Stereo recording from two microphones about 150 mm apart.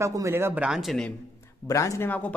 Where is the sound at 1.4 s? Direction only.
20° left (ahead or behind).